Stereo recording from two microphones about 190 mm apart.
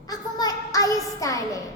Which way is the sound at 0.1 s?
20° left (ahead or behind).